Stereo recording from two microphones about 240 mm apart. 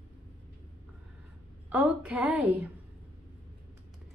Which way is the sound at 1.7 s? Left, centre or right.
Centre.